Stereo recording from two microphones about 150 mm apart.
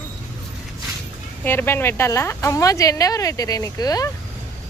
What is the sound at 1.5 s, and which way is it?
A woman's voice, 15° left (ahead or behind).